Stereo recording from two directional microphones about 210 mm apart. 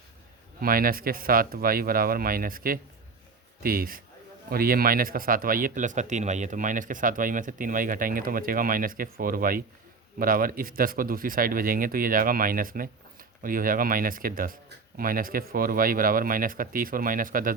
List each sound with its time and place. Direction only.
0.6 s speech: 45° right (ahead or behind)